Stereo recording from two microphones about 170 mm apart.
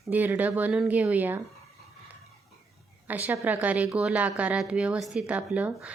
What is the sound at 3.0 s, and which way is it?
Speech, 10° right (ahead or behind).